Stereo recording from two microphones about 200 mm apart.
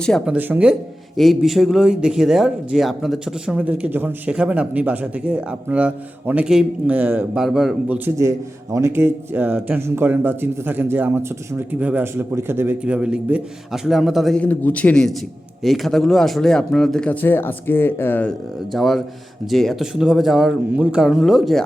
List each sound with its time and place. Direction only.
0.0 s speech: 5° left (ahead or behind)
0.3 s speech: 10° right (ahead or behind)